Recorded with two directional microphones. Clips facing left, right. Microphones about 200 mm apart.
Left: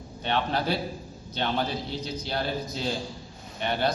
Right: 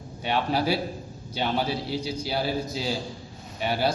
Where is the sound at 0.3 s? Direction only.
10° right (ahead or behind).